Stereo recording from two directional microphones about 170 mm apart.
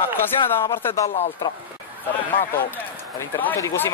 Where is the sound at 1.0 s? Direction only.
40° left (ahead or behind).